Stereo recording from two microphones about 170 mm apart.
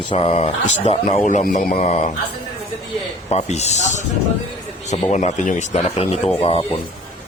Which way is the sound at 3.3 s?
40° left (ahead or behind).